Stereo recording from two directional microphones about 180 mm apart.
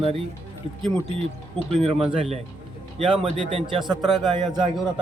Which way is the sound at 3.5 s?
30° right (ahead or behind).